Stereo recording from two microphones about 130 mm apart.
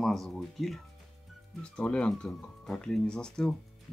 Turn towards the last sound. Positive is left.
turn(degrees=5)  # may be behind; listen again after turning